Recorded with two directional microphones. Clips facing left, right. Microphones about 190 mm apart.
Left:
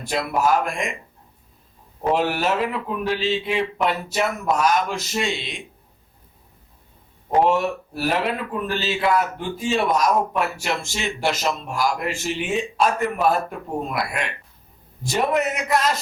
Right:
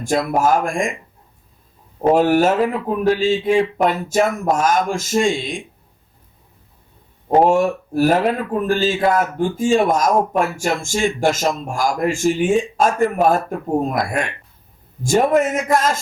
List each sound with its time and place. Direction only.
0.0 s speech: 45° right (ahead or behind)
2.0 s speech: 45° right (ahead or behind)
7.3 s speech: 45° right (ahead or behind)